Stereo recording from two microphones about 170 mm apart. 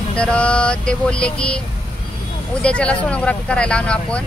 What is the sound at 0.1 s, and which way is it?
Vehicle, 5° left (ahead or behind).